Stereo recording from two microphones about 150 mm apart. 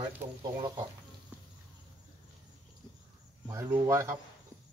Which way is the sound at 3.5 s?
20° right (ahead or behind).